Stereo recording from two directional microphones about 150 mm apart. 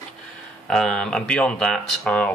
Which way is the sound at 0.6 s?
5° left (ahead or behind).